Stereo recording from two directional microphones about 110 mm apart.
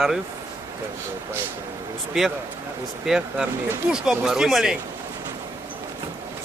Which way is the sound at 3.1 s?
5° right (ahead or behind).